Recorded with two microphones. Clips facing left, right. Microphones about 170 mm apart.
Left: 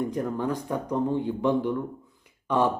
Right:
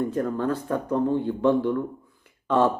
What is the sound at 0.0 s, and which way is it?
Speech, 15° left (ahead or behind).